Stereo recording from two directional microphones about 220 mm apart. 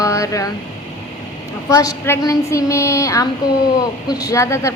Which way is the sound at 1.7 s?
15° left (ahead or behind).